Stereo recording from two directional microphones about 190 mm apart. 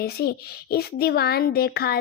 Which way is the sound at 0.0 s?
55° left (ahead or behind).